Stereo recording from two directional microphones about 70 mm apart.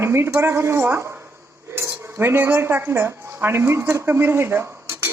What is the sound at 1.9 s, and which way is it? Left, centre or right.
Cutlery, right.